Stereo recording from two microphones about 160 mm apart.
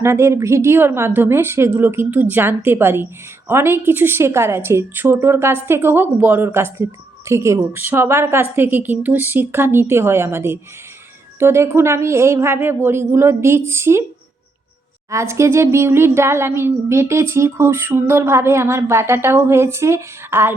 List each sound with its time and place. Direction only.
0.0 s a woman's voice: 15° right (ahead or behind)
15.1 s a woman's voice: 15° right (ahead or behind)